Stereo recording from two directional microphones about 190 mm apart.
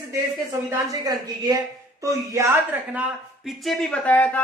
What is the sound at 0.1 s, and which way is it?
A woman's voice, 15° right (ahead or behind).